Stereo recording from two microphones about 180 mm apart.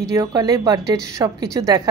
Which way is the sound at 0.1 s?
20° right (ahead or behind).